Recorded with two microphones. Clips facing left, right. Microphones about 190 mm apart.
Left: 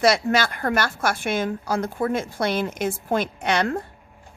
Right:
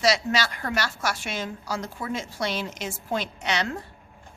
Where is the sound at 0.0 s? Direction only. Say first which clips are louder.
Left 4 dB; 55° left (ahead or behind).